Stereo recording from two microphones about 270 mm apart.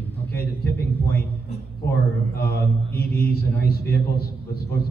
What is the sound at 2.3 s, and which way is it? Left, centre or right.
A man's voice, left.